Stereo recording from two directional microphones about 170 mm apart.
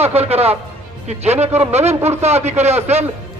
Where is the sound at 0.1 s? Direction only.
35° right (ahead or behind).